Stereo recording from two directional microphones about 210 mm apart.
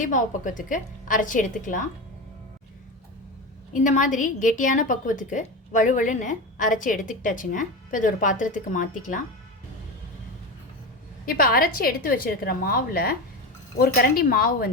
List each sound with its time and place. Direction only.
0.0 s a woman's voice: 40° left (ahead or behind)
3.7 s a woman's voice: 35° left (ahead or behind)
11.3 s a woman's voice: 45° left (ahead or behind)